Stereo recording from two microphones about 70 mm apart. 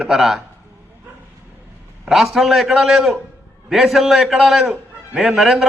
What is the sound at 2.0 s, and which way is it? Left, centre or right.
A man's voice, centre.